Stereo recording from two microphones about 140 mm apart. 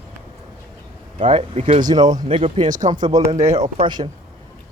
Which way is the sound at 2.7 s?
65° right (ahead or behind).